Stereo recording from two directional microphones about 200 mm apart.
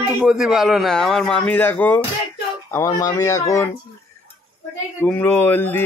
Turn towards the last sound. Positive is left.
turn(degrees=10)  # may be behind; listen again after turning